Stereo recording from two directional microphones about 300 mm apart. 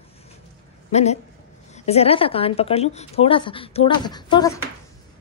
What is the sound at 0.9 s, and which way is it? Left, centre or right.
A woman's voice, left.